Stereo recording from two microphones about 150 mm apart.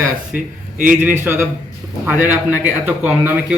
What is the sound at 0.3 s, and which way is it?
Speech, 10° right (ahead or behind).